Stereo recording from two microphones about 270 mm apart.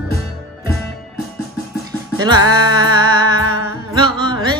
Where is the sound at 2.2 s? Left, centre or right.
Centre.